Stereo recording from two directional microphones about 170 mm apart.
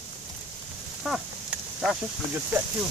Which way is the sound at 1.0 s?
5° right (ahead or behind).